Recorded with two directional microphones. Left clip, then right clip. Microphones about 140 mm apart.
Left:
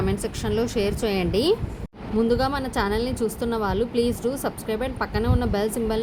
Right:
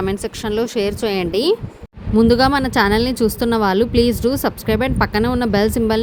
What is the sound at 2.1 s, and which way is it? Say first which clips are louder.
Speech: right 9 dB; 75° right (ahead or behind).